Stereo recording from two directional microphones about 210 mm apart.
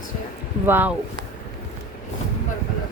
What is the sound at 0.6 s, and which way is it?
Speech, 10° right (ahead or behind).